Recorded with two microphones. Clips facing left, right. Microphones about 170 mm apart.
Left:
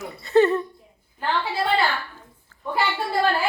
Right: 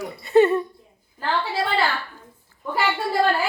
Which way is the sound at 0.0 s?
15° right (ahead or behind).